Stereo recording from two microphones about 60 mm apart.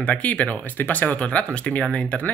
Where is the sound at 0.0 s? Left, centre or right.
Left.